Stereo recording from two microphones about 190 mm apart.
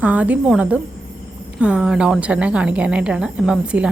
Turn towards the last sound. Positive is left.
turn(degrees=-5)  # may be behind; listen again after turning